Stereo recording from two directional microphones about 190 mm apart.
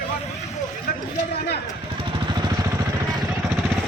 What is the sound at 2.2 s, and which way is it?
Vehicle, 20° right (ahead or behind).